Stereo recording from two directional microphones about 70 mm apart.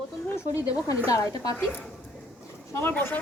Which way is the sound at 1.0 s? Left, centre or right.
Left.